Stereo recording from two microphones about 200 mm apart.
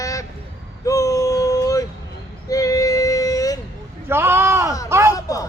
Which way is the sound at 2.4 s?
15° left (ahead or behind).